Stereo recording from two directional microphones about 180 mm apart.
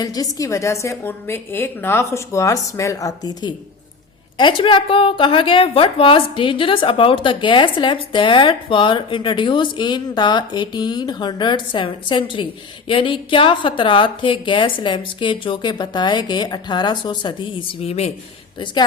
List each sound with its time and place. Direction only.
0.0 s a woman's voice: 20° left (ahead or behind)